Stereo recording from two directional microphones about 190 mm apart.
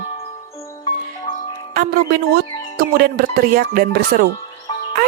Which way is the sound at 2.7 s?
50° right (ahead or behind).